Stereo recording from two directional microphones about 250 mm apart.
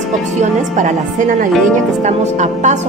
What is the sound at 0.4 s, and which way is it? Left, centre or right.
A woman's voice, right.